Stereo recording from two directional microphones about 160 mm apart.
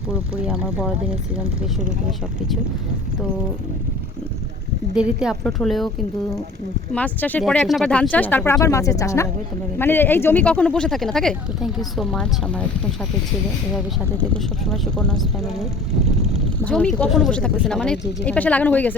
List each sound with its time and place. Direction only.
0.1 s speech: 5° right (ahead or behind)
4.9 s speech: 5° right (ahead or behind)
6.9 s a woman's voice: 10° left (ahead or behind)
14.7 s speech: 5° left (ahead or behind)